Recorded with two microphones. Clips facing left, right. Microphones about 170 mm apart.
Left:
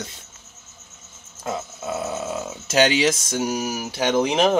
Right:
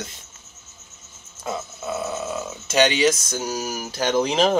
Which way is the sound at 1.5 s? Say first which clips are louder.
Left 1 dB; 15° left (ahead or behind).